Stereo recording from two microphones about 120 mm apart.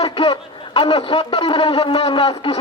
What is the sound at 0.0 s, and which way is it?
A man's voice, 55° left (ahead or behind).